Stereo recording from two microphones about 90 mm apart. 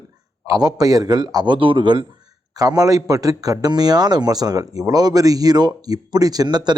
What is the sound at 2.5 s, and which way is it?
A man's voice, 45° right (ahead or behind).